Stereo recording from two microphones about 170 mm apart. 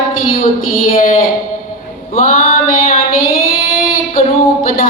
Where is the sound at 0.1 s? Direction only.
55° left (ahead or behind).